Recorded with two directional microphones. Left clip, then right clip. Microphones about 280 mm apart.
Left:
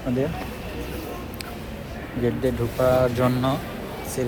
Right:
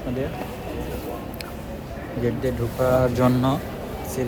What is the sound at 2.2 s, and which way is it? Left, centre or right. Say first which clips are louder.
Speech: left 1 dB; centre.